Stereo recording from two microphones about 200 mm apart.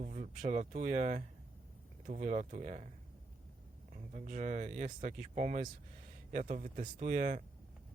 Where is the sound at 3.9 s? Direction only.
35° right (ahead or behind).